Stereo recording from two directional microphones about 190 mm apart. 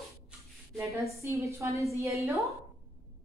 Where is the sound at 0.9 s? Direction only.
15° right (ahead or behind).